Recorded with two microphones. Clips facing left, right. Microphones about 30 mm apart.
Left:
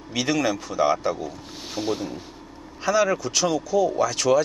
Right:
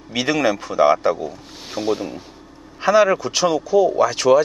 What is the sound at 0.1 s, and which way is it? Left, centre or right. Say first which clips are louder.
Speech: right 4 dB; centre.